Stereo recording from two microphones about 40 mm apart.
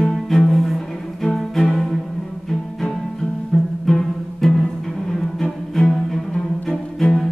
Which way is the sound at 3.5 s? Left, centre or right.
Centre.